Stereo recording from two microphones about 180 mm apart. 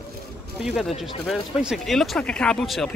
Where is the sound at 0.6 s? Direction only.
Centre (ahead or behind).